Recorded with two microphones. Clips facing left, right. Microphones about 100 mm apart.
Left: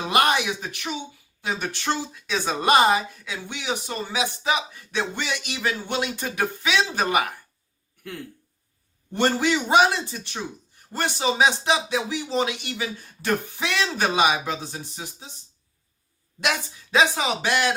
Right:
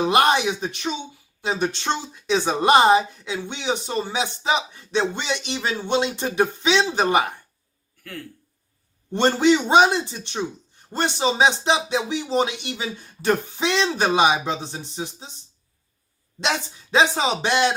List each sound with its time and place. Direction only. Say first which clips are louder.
0.0 s a man's voice: right 3 dB; 25° right (ahead or behind)
9.1 s a man's voice: right 4 dB; 25° right (ahead or behind)
16.4 s a man's voice: right 1 dB; 25° right (ahead or behind)